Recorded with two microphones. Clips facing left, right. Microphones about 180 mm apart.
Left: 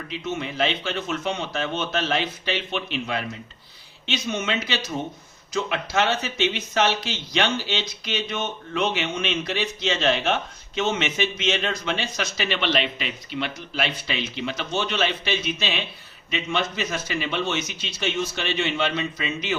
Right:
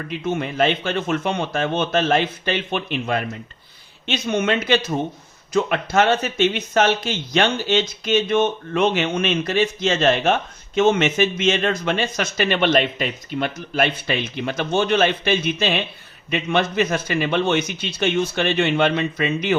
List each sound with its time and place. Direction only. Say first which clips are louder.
0.1 s a man's voice: right 5 dB; 55° right (ahead or behind)